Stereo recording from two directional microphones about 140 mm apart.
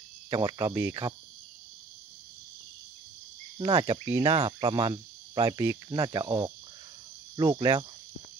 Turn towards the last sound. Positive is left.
turn(degrees=-30)  # may be behind; listen again after turning